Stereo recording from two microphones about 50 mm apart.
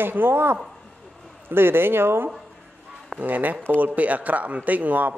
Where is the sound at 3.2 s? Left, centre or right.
Right.